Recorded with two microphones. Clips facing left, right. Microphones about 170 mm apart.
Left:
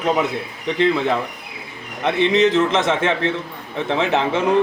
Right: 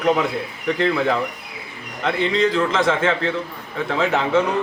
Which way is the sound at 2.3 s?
20° left (ahead or behind).